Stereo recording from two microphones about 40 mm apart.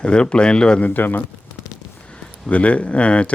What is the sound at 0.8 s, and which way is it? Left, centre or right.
Speech, left.